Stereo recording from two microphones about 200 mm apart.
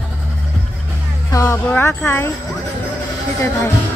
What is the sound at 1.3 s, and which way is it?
Speech, 15° left (ahead or behind).